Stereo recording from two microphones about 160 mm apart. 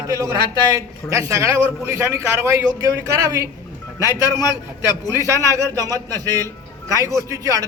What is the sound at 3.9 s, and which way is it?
Speech, 25° left (ahead or behind).